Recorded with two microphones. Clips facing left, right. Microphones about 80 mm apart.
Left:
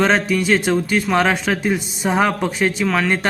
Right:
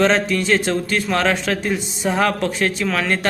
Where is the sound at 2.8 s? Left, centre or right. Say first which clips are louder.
Left 3 dB; centre.